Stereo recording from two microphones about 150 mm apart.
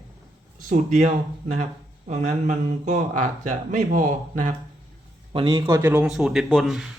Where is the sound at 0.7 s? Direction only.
55° right (ahead or behind).